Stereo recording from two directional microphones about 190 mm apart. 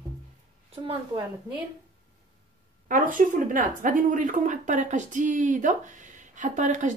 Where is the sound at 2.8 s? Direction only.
45° right (ahead or behind).